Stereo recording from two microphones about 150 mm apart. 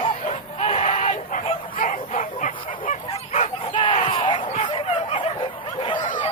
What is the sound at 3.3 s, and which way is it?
Chicken, 50° left (ahead or behind).